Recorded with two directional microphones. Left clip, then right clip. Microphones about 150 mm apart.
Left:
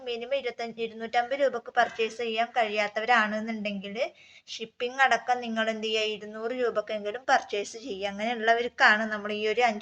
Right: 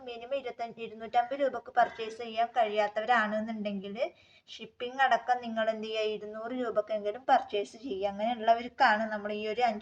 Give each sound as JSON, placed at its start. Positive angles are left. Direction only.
{"t": 0.1, "sound": "speech", "side_deg": 15}